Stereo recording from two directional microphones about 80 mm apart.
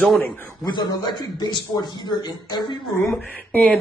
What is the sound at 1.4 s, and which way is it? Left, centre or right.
Speech, left.